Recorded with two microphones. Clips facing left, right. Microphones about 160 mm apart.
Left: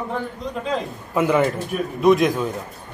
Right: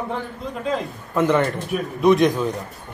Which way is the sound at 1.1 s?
5° left (ahead or behind).